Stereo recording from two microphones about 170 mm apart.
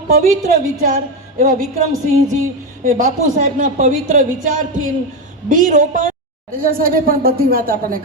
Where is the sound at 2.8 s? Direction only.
50° right (ahead or behind).